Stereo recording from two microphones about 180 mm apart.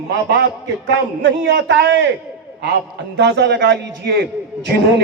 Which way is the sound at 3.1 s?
70° right (ahead or behind).